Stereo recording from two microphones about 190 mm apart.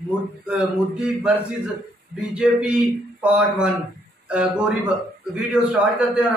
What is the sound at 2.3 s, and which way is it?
Speech, 5° right (ahead or behind).